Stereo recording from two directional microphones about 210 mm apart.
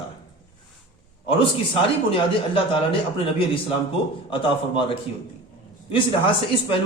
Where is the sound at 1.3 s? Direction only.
25° left (ahead or behind).